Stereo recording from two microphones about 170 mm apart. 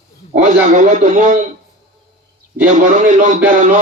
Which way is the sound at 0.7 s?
45° right (ahead or behind).